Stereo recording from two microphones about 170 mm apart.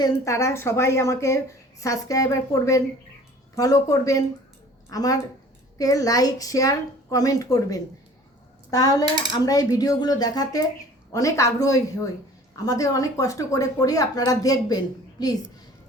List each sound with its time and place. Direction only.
0.0 s a woman's voice: 20° left (ahead or behind)